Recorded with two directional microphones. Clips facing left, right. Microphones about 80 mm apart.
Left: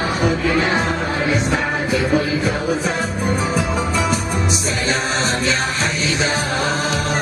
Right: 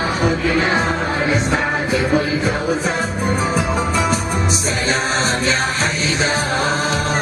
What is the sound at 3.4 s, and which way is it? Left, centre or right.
Music, right.